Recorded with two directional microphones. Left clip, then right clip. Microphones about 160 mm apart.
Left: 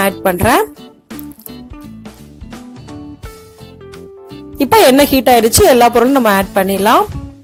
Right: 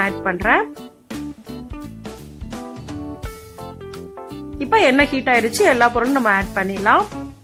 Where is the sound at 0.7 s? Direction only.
Centre (ahead or behind).